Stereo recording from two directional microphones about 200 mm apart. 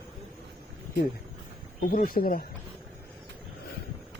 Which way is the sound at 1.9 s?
45° left (ahead or behind).